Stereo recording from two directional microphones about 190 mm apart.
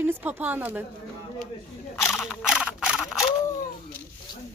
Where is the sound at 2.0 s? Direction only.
Centre (ahead or behind).